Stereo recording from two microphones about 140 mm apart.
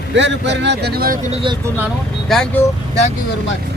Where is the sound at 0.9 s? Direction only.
90° right.